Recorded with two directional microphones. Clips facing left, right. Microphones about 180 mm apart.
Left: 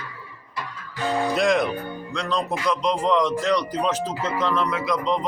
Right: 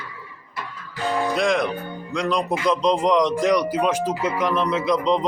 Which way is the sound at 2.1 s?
15° right (ahead or behind).